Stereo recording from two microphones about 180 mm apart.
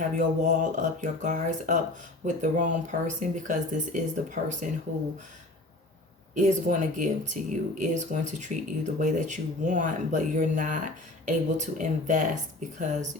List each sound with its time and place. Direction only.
0.0 s speech: 45° right (ahead or behind)
6.3 s speech: 40° right (ahead or behind)